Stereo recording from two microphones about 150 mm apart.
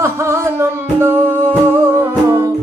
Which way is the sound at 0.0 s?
20° right (ahead or behind).